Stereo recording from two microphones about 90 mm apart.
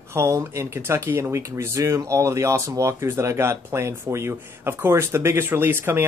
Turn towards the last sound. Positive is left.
turn(degrees=-25)  # may be behind; listen again after turning